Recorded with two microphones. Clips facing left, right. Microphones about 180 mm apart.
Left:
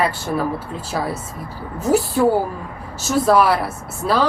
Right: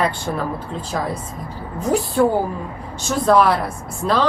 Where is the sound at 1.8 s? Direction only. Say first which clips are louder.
Even; 5° left (ahead or behind).